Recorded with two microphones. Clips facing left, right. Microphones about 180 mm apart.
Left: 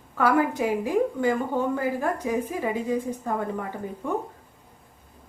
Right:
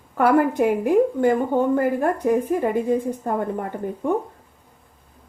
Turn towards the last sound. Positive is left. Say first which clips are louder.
# right 6 dB
turn(degrees=-50)  # may be behind; listen again after turning